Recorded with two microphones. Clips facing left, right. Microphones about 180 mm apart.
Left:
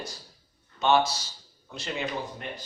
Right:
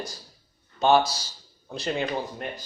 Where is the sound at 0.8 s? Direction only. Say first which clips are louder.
Right 3 dB; 35° right (ahead or behind).